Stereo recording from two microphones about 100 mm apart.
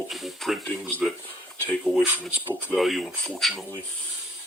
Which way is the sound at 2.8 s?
Centre (ahead or behind).